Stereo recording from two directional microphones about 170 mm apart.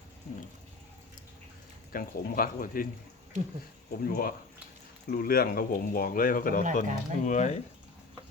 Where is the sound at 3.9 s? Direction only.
60° left (ahead or behind).